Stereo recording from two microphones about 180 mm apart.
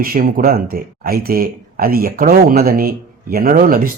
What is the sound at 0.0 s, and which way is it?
Speech, 50° right (ahead or behind).